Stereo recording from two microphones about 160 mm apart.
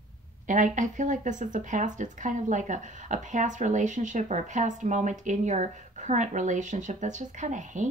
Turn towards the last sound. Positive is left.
turn(degrees=-50)  # may be behind; listen again after turning